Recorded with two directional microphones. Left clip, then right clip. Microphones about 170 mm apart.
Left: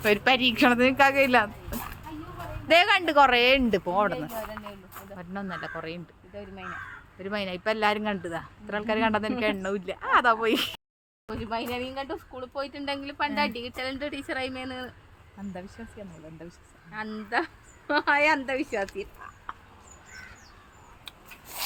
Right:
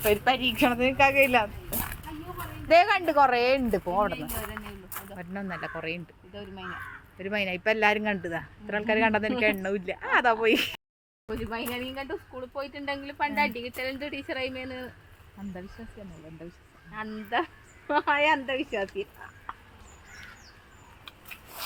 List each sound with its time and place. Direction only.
0.0 s a woman's voice: 30° left (ahead or behind)
2.6 s a woman's voice: 15° left (ahead or behind)
5.1 s speech: centre (ahead or behind)
17.2 s speech: 15° left (ahead or behind)